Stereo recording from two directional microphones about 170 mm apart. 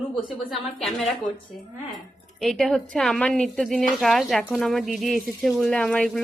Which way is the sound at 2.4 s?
Centre (ahead or behind).